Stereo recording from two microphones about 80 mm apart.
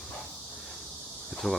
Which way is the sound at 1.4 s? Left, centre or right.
Centre.